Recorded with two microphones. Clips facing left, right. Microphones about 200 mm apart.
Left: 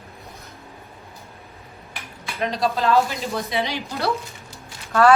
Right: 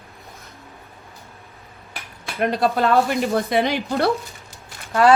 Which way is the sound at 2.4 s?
55° right (ahead or behind).